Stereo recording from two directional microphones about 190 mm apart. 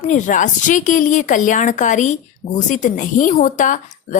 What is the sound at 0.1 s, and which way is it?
A woman's voice, 40° left (ahead or behind).